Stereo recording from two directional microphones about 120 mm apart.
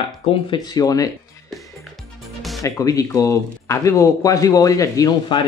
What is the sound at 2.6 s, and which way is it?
Speech, 30° left (ahead or behind).